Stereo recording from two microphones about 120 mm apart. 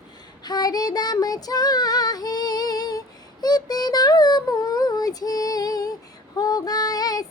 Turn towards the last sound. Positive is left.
turn(degrees=30)  # may be behind; listen again after turning